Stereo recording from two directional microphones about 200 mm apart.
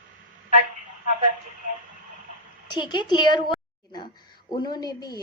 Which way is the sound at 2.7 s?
20° left (ahead or behind).